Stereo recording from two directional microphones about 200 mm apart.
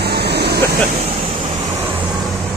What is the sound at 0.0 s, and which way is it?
Vehicle, 55° right (ahead or behind).